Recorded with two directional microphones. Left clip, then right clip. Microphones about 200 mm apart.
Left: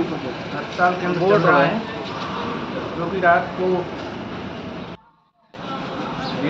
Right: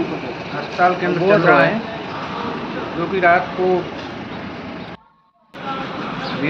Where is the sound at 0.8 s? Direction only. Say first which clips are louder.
Right 3 dB; 15° right (ahead or behind).